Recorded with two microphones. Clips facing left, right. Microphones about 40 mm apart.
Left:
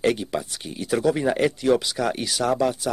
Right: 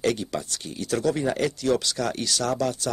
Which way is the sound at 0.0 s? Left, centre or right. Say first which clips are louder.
Left 3 dB; centre.